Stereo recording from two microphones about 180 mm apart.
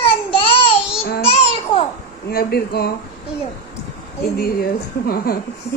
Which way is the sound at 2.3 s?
60° left (ahead or behind).